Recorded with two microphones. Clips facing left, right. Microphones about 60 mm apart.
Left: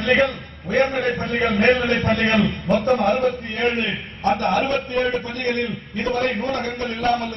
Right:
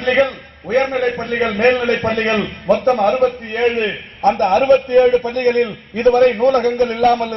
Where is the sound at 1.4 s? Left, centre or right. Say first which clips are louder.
Right 3 dB; right.